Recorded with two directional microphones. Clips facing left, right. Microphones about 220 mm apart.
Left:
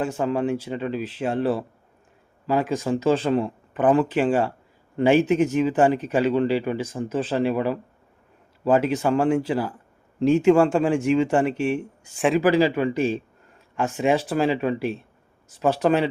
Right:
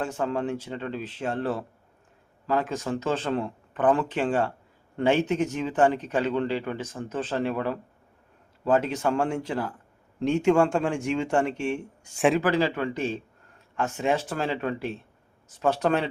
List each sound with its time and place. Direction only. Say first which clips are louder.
0.0 s speech: left 4 dB; 10° left (ahead or behind)
12.5 s speech: left 5 dB; 10° left (ahead or behind)